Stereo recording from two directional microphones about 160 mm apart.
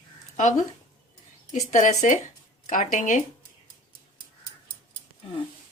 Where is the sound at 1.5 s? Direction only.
50° left (ahead or behind).